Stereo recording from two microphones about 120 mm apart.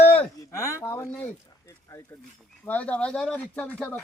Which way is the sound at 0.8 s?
20° left (ahead or behind).